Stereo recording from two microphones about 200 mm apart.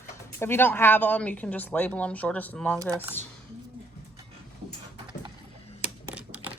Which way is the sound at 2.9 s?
10° right (ahead or behind).